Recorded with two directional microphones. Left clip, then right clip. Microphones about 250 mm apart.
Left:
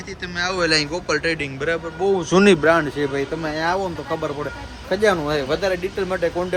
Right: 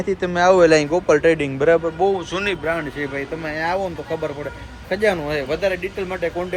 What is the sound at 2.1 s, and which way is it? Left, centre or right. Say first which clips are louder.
Speech: left 7 dB; left.